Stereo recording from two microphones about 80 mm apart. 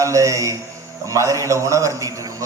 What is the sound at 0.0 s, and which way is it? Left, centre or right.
A man's voice, right.